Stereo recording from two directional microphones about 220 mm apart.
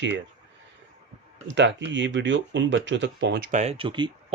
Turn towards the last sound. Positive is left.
turn(degrees=-20)  # may be behind; listen again after turning